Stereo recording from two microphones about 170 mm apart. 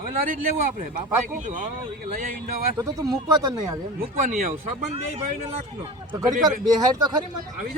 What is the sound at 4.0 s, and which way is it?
Speech, 50° right (ahead or behind).